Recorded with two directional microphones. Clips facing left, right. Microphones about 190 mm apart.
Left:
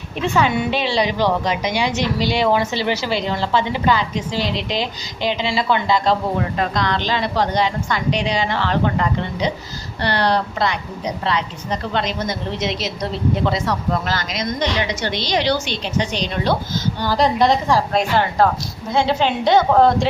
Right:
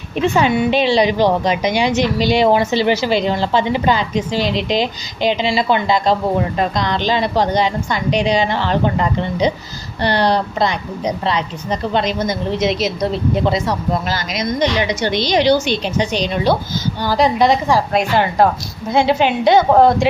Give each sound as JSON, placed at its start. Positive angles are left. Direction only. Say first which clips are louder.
{"t": 0.2, "sound": "a woman's voice", "louder": "right 4 dB", "side_deg": -20}
{"t": 18.4, "sound": "a woman's voice", "louder": "right 2 dB", "side_deg": -15}